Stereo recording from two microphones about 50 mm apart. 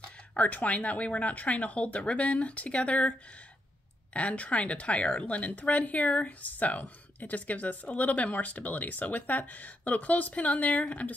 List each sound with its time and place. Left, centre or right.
0.3 s speech: left